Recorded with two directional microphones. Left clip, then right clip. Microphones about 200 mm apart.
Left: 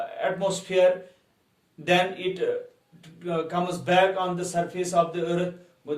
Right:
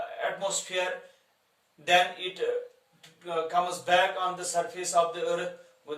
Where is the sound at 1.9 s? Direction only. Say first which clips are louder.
Left 1 dB; 25° right (ahead or behind).